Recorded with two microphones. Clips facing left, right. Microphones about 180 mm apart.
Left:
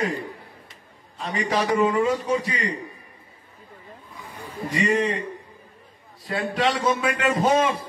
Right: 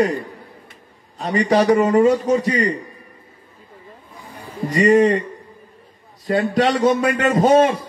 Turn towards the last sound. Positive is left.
turn(degrees=-40)  # may be behind; listen again after turning